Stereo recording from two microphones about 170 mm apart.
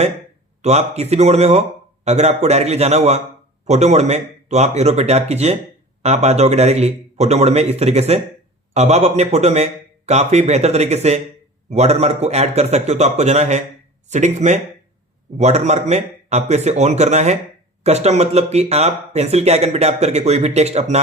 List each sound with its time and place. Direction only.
0.6 s speech: 40° right (ahead or behind)